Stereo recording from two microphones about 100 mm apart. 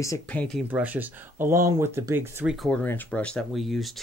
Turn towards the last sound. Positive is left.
turn(degrees=0)  # may be behind; listen again after turning